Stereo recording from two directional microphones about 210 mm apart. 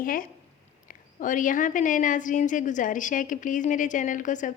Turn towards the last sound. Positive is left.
turn(degrees=35)  # may be behind; listen again after turning